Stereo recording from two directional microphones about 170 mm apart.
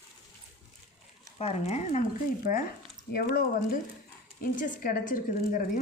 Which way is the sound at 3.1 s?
60° left (ahead or behind).